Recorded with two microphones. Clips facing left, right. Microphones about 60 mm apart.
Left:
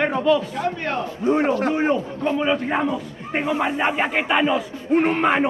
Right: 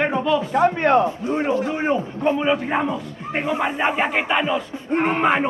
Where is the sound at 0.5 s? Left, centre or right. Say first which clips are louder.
Right 8 dB; right.